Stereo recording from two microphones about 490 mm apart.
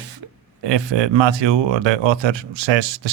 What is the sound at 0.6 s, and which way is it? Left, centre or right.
Speech, right.